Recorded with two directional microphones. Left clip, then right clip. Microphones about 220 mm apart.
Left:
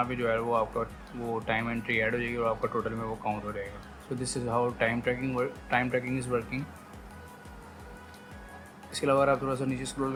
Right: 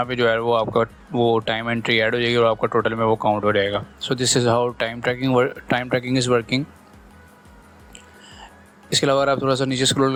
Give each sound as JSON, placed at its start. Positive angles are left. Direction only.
{"t": 0.0, "sound": "speech", "side_deg": -40}
{"t": 8.9, "sound": "speech", "side_deg": -35}